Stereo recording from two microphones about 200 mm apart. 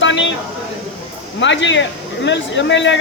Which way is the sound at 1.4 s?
65° left (ahead or behind).